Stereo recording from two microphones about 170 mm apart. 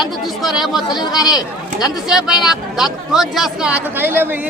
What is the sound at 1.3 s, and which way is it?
Speech, 5° right (ahead or behind).